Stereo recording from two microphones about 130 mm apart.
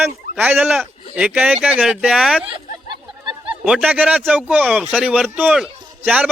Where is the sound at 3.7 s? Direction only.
10° right (ahead or behind).